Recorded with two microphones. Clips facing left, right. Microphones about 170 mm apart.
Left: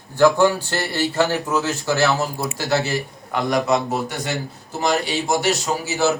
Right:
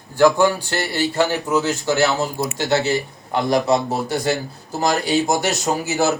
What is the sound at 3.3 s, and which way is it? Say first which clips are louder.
A man's voice: right 2 dB; 30° right (ahead or behind).